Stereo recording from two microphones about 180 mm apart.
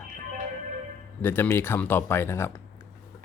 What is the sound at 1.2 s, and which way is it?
Speech, 10° left (ahead or behind).